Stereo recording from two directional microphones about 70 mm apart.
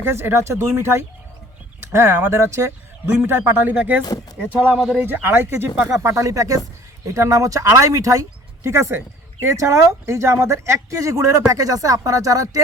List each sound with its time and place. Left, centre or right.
0.0 s speech: right
2.3 s speech: right
3.1 s speech: right
3.8 s speech: right